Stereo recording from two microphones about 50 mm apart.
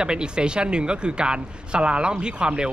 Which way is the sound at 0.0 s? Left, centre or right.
Centre.